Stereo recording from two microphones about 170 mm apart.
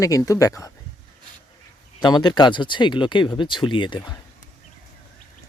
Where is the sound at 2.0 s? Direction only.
25° left (ahead or behind).